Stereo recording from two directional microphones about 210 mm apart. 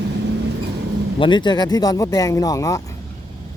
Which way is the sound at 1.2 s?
20° left (ahead or behind).